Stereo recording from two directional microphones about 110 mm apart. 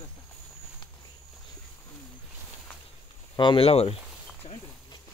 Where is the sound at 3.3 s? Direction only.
50° left (ahead or behind).